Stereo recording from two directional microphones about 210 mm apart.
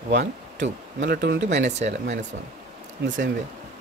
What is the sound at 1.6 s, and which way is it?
Speech, 35° right (ahead or behind).